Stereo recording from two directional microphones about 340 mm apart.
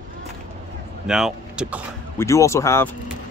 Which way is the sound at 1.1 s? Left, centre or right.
Centre.